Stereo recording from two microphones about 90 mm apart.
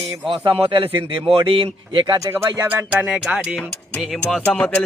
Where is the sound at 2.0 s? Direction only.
45° right (ahead or behind).